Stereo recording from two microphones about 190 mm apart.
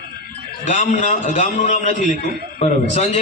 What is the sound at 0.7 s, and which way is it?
A man's voice, 40° left (ahead or behind).